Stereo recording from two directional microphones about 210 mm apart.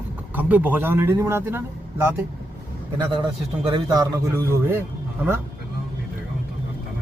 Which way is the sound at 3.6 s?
20° right (ahead or behind).